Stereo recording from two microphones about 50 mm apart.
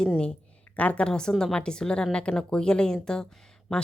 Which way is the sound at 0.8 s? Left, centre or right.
Left.